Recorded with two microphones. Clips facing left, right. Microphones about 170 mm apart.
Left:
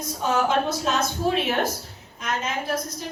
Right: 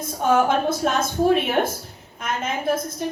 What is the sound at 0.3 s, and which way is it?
A woman's voice, 55° right (ahead or behind).